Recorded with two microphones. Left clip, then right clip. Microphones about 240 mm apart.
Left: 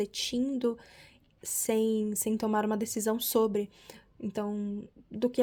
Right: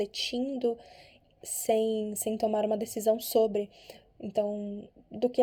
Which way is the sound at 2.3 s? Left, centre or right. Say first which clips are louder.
Right 2 dB; left.